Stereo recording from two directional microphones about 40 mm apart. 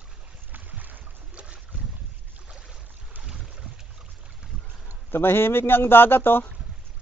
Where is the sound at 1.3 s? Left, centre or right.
Right.